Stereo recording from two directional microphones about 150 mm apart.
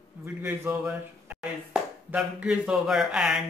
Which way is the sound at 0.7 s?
5° right (ahead or behind).